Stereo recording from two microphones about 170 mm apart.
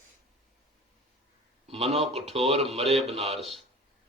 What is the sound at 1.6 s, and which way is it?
Speech, 35° right (ahead or behind).